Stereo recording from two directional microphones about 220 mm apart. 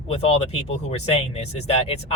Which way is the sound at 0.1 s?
30° left (ahead or behind).